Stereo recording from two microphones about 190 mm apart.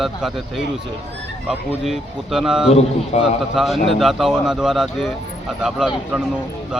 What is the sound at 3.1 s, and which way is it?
Speech, 35° left (ahead or behind).